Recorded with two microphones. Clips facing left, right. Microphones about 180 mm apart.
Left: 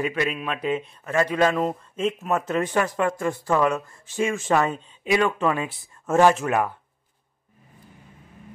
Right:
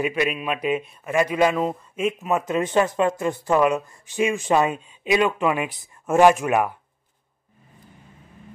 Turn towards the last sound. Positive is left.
turn(degrees=-15)  # may be behind; listen again after turning